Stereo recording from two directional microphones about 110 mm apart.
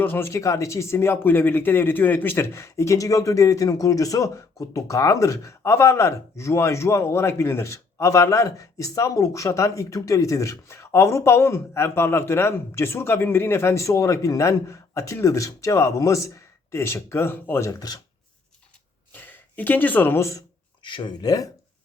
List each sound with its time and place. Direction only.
0.0 s speech: 20° left (ahead or behind); by 18.0 s 35° left (ahead or behind)
19.1 s speech: 15° left (ahead or behind)
20.8 s speech: 45° left (ahead or behind)